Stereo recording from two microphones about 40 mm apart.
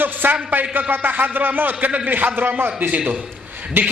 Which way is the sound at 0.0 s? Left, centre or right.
Right.